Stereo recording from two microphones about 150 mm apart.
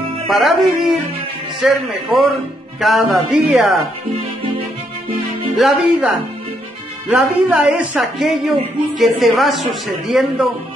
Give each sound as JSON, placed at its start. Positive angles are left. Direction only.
{"t": 0.3, "sound": "speech", "side_deg": 0}
{"t": 5.6, "sound": "speech", "side_deg": -10}